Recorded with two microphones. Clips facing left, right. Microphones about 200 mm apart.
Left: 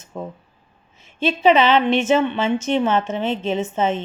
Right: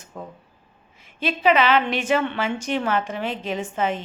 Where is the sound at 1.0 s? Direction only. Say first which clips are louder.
Left 4 dB; 25° left (ahead or behind).